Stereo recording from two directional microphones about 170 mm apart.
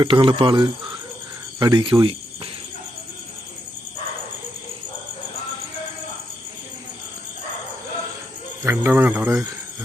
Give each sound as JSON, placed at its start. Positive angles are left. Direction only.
{"t": 0.0, "sound": "speech", "side_deg": -30}
{"t": 8.6, "sound": "speech", "side_deg": -10}